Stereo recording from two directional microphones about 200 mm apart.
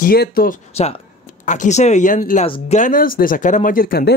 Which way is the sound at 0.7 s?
30° left (ahead or behind).